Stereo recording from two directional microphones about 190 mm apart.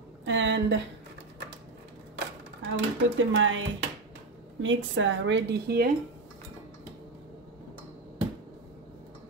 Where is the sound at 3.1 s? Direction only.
90° right.